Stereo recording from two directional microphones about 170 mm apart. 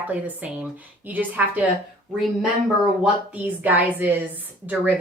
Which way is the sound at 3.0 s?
10° right (ahead or behind).